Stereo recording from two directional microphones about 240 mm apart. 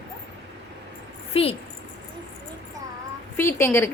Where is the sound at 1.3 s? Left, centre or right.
Left.